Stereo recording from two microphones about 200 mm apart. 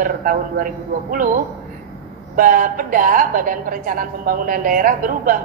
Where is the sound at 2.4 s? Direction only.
45° right (ahead or behind).